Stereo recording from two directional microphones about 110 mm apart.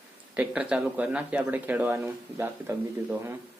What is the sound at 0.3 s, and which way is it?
Speech, 10° right (ahead or behind).